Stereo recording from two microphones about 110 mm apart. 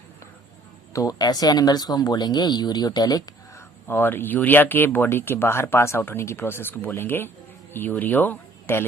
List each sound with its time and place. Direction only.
0.9 s speech: 35° left (ahead or behind)
3.8 s speech: 20° left (ahead or behind)